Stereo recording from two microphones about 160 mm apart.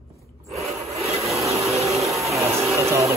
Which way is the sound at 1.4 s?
20° right (ahead or behind).